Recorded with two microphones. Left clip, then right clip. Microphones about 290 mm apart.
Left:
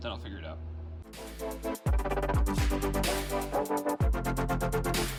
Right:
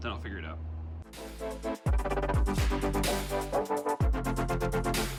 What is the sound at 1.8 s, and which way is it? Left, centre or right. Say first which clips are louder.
Music: even; centre.